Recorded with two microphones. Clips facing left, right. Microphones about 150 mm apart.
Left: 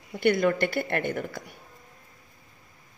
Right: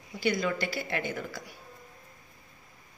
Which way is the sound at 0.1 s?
60° left (ahead or behind).